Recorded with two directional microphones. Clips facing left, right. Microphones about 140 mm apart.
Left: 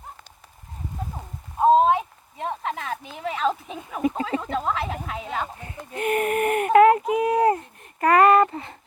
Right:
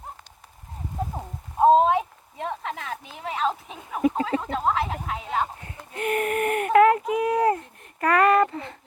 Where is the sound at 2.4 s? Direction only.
35° left (ahead or behind).